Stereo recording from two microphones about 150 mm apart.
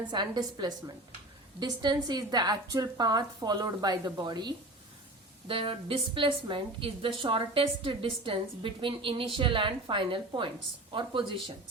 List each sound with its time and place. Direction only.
0.1 s a woman's voice: 30° right (ahead or behind)